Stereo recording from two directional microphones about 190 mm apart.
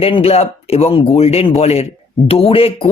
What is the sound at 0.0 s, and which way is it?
Speech, 30° left (ahead or behind).